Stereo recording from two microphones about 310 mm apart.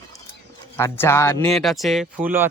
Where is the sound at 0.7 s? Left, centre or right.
Centre.